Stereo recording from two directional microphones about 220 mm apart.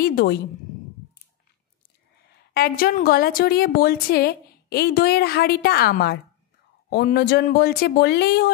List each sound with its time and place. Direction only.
0.0 s a woman's voice: 40° left (ahead or behind)
2.5 s a woman's voice: 40° left (ahead or behind)